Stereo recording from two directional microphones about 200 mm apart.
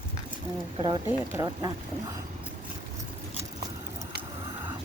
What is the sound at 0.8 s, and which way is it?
Speech, 20° right (ahead or behind).